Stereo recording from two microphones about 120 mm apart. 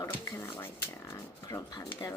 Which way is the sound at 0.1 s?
25° left (ahead or behind).